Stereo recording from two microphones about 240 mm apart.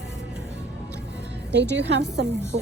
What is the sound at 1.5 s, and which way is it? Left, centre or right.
A woman's voice, right.